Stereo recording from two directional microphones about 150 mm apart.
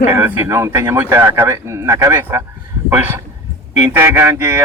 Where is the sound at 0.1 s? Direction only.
15° right (ahead or behind).